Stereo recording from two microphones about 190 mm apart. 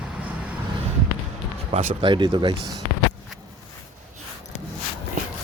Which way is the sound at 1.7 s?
25° right (ahead or behind).